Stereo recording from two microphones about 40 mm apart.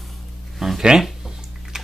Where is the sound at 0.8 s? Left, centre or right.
Centre.